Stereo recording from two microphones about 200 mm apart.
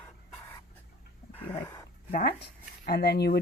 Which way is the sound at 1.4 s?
10° left (ahead or behind).